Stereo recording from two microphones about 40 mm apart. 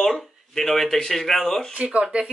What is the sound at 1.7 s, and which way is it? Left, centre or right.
Speech, right.